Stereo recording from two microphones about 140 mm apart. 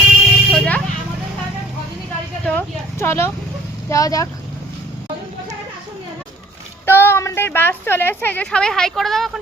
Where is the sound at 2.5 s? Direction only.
15° left (ahead or behind).